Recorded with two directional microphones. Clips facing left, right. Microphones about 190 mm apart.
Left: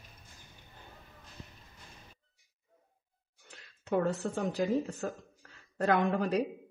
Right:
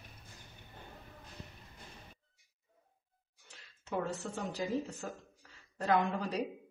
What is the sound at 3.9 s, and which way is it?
A woman's voice, 50° left (ahead or behind).